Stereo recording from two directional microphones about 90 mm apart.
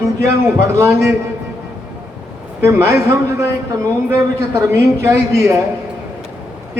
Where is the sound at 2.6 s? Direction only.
30° right (ahead or behind).